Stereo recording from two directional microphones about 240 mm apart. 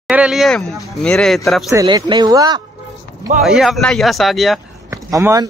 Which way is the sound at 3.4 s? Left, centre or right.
Centre.